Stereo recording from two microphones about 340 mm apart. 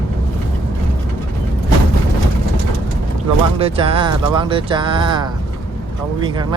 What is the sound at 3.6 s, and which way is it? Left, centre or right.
Speech, centre.